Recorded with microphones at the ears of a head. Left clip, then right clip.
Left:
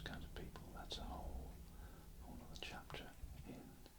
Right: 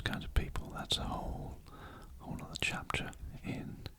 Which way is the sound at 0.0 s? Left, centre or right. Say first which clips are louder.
Right 13 dB; right.